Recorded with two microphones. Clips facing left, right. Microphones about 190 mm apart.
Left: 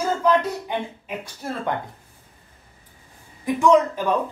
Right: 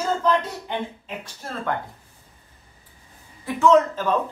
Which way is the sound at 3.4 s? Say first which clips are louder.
Even; 15° left (ahead or behind).